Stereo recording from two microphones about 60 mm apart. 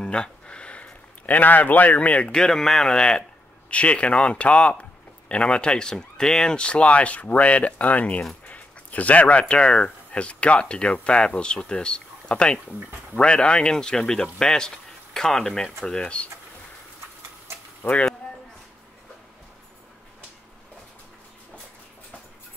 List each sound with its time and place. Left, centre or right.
0.0 s a sound: centre
2.3 s speech: centre
17.8 s speech: left